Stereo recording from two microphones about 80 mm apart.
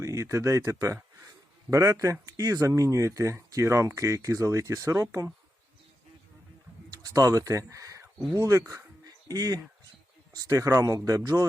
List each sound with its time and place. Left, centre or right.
0.0 s speech: right
6.9 s speech: right
10.5 s speech: right